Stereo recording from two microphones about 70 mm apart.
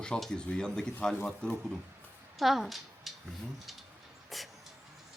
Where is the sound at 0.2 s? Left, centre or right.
Centre.